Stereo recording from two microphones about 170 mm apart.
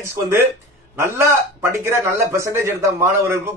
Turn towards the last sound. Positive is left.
turn(degrees=-15)  # may be behind; listen again after turning